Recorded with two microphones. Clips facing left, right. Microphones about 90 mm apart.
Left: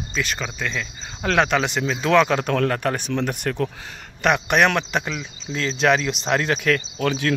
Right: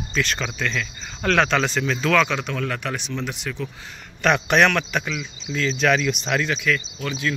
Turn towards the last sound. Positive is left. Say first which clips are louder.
# left 4 dB
turn(degrees=60)  # may be behind; listen again after turning